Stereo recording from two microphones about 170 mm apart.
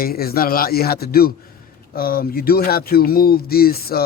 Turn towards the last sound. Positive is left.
turn(degrees=65)  # may be behind; listen again after turning